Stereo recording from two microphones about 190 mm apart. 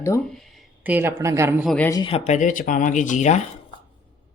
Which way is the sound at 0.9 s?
10° right (ahead or behind).